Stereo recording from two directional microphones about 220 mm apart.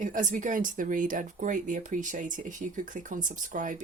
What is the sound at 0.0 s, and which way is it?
Speech, 35° right (ahead or behind).